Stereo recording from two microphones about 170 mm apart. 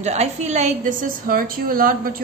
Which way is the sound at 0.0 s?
40° right (ahead or behind).